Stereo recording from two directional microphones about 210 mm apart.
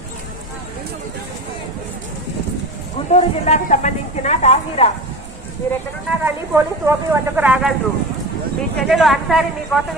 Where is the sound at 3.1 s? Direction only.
30° left (ahead or behind).